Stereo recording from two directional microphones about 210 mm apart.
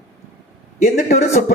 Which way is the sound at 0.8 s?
40° left (ahead or behind).